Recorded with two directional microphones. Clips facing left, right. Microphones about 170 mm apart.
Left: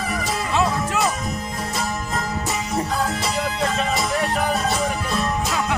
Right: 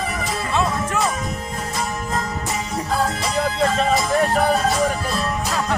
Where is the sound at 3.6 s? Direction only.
35° right (ahead or behind).